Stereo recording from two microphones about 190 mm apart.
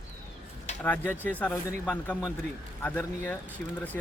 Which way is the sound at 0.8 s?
10° left (ahead or behind).